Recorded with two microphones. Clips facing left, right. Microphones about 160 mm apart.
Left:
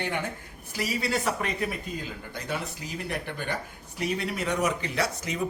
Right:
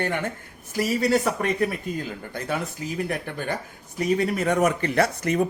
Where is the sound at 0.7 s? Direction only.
45° right (ahead or behind).